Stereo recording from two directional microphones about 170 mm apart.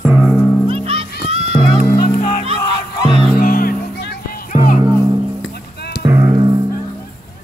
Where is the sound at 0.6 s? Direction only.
35° right (ahead or behind).